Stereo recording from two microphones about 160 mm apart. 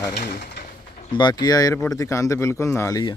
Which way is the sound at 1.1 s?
25° left (ahead or behind).